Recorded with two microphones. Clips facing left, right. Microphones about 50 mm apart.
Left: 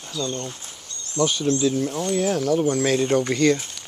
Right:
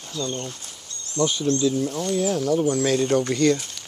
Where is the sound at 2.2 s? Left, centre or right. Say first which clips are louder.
Left 1 dB; left.